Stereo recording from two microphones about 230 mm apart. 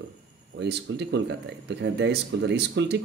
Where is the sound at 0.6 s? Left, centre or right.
Right.